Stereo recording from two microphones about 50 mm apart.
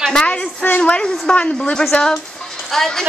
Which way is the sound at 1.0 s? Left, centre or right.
Centre.